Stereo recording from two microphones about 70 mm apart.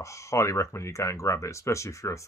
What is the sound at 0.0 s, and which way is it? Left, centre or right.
Speech, left.